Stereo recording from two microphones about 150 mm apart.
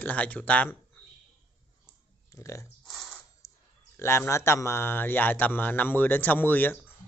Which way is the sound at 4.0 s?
15° left (ahead or behind).